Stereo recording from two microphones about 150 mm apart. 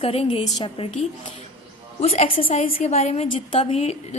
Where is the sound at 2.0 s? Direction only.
45° left (ahead or behind).